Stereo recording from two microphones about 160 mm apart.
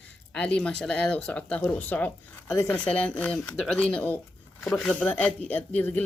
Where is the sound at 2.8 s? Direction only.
10° left (ahead or behind).